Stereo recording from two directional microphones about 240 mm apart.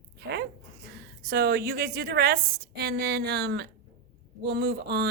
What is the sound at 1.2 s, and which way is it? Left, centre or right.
A woman's voice, right.